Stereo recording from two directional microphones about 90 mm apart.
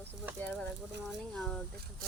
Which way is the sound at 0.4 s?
20° left (ahead or behind).